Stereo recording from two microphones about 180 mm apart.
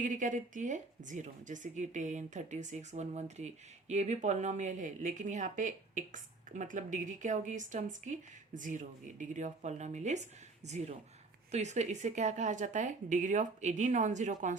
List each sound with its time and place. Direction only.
0.0 s a woman's voice: 45° right (ahead or behind)